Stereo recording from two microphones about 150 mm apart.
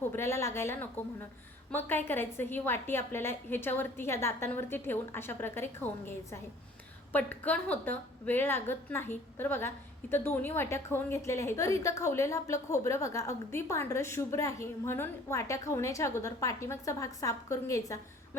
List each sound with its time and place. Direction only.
0.0 s a woman's voice: 15° left (ahead or behind)